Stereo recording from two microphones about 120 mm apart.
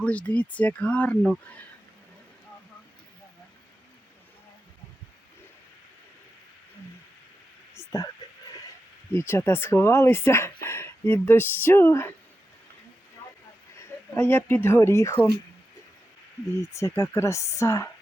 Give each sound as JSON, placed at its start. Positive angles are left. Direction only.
{"t": 0.0, "sound": "speech", "side_deg": 10}
{"t": 7.8, "sound": "a sound", "side_deg": 25}
{"t": 9.1, "sound": "speech", "side_deg": 20}
{"t": 14.2, "sound": "speech", "side_deg": 20}
{"t": 16.6, "sound": "speech", "side_deg": 25}